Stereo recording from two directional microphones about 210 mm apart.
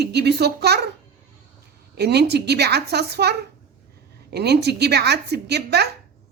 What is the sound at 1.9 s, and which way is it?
Speech, 50° right (ahead or behind).